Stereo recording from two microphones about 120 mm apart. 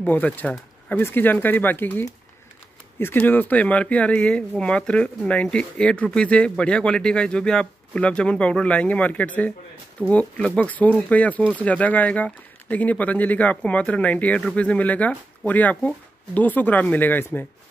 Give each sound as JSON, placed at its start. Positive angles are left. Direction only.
{"t": 0.0, "sound": "speech", "side_deg": 15}